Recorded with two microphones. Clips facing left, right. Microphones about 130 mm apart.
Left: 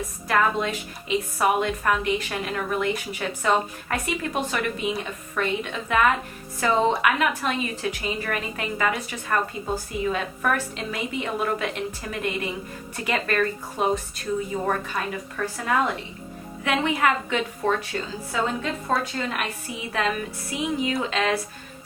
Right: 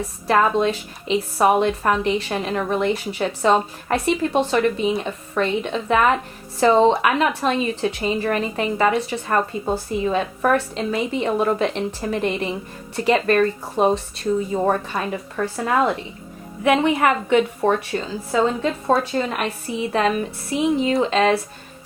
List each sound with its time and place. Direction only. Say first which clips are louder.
0.3 s a woman's voice: right 5 dB; 25° right (ahead or behind)
18.3 s a woman's voice: right 7 dB; 30° right (ahead or behind)